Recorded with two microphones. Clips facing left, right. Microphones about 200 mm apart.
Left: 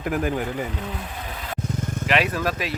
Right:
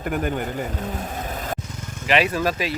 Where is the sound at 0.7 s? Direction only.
45° right (ahead or behind).